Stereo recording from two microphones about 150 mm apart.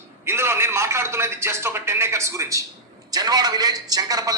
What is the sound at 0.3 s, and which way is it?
A man's voice, 15° right (ahead or behind).